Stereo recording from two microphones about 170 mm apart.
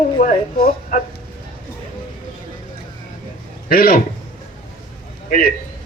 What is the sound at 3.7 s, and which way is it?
Speech, 60° left (ahead or behind).